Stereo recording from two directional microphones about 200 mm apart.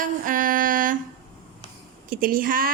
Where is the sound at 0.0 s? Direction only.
45° right (ahead or behind).